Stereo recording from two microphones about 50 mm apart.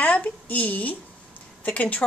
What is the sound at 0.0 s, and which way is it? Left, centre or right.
Speech, left.